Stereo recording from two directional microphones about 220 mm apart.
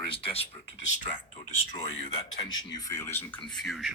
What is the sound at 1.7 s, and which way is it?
Speech, 25° left (ahead or behind).